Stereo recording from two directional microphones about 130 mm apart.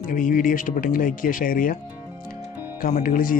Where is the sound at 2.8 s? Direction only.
90° left.